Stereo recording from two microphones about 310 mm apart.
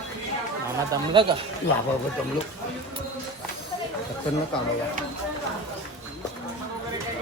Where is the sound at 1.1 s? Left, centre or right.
Centre.